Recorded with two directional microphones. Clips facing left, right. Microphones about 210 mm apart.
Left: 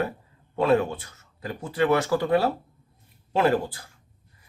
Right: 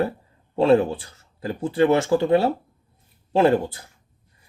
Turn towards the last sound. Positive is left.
turn(degrees=-25)  # may be behind; listen again after turning